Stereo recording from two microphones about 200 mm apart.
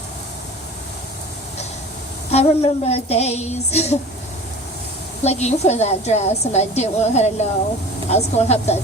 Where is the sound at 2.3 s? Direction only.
30° left (ahead or behind).